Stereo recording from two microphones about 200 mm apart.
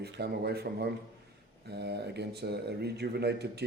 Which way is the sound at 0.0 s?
55° right (ahead or behind).